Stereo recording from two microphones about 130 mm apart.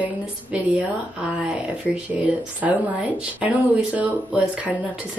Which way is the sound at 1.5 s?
10° right (ahead or behind).